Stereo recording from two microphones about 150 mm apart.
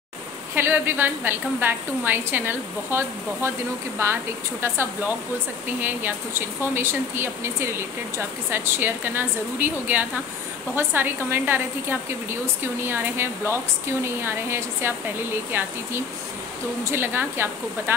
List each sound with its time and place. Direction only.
0.6 s speech: 15° right (ahead or behind)
16.8 s speech: 15° right (ahead or behind)